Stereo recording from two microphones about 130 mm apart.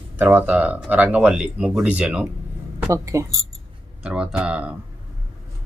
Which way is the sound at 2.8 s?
25° right (ahead or behind).